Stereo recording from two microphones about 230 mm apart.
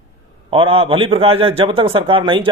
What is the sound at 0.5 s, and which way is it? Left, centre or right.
A man's voice, right.